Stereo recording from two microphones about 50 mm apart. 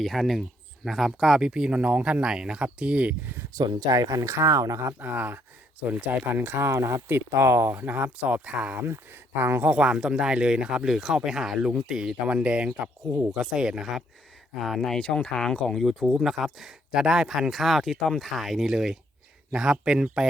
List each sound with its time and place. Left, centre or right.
0.0 s speech: centre
1.4 s speech: centre
2.2 s speech: centre
4.1 s speech: right
4.9 s speech: right
7.7 s speech: right
7.9 s speech: right
8.8 s speech: right
9.6 s speech: right
12.2 s speech: right
13.3 s speech: centre
14.9 s speech: centre
16.0 s speech: centre